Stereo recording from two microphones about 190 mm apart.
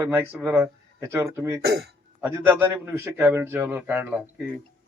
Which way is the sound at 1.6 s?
60° right (ahead or behind).